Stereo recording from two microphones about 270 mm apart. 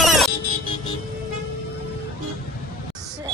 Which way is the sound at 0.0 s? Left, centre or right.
Centre.